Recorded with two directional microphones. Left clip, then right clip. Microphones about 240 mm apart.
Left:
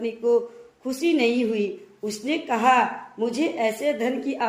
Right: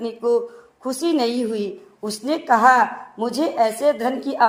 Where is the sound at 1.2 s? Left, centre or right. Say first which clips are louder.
Left 1 dB; right.